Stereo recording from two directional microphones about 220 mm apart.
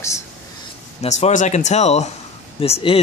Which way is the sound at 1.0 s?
30° left (ahead or behind).